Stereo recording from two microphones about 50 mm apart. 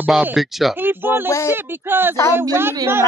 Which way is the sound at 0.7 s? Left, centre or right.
Right.